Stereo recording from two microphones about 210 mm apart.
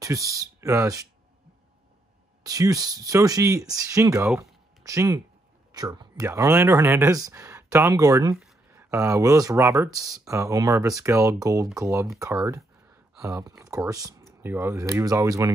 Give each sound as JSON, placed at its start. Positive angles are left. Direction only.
{"t": 0.0, "sound": "speech", "side_deg": -15}
{"t": 2.4, "sound": "speech", "side_deg": -15}
{"t": 9.9, "sound": "speech", "side_deg": 0}
{"t": 10.2, "sound": "speech", "side_deg": -15}